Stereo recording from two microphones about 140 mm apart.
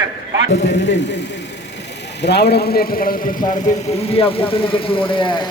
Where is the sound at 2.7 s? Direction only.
90° left; by 3.9 s 65° left (ahead or behind).